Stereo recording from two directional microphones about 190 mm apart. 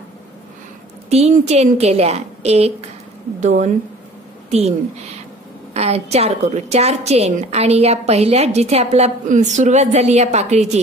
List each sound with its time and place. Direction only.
1.1 s a woman's voice: 35° right (ahead or behind)